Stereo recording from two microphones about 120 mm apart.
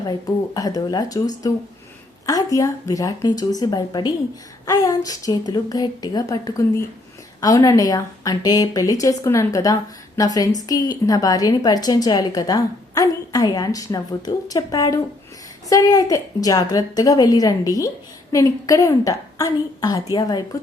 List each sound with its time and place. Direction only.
0.1 s a woman's voice: 30° left (ahead or behind)